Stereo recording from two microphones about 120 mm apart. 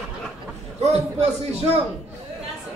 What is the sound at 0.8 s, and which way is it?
A man's voice, 65° right (ahead or behind).